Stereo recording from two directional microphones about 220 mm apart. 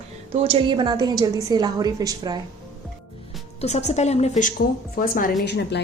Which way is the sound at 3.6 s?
30° left (ahead or behind).